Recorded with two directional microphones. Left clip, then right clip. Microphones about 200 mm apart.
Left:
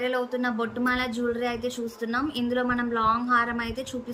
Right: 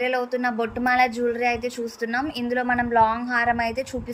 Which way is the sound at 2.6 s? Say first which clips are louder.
Right 7 dB; 45° left (ahead or behind).